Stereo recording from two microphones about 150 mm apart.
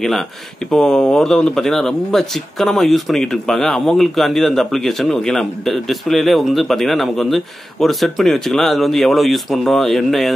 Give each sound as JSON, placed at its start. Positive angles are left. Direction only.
{"t": 0.7, "sound": "speech", "side_deg": 5}